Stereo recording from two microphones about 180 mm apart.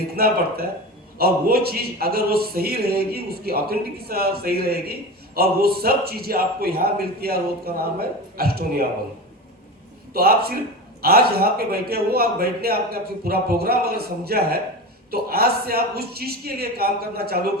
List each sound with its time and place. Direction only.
0.2 s a man's voice: 60° right (ahead or behind)
10.1 s a man's voice: 60° right (ahead or behind)